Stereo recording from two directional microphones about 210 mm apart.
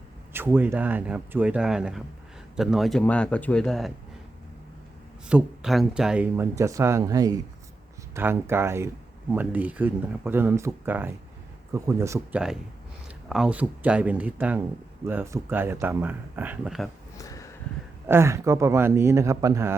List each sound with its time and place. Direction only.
0.3 s a man's voice: 10° right (ahead or behind)
5.3 s speech: centre (ahead or behind)
13.2 s speech: 5° right (ahead or behind)
17.2 s a sound: 15° left (ahead or behind)
18.0 s speech: 10° right (ahead or behind)